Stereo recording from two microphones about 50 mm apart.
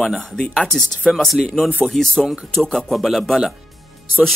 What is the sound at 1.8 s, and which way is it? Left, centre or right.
Speech, centre.